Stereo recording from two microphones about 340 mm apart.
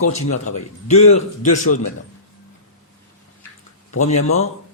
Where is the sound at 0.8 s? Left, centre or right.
Centre.